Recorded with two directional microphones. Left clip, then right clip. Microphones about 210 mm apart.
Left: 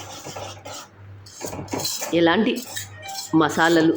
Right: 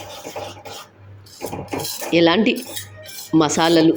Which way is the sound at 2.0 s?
15° right (ahead or behind).